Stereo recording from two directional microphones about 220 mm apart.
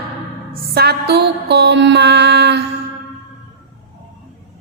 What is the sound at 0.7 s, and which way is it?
A woman's voice, 45° right (ahead or behind).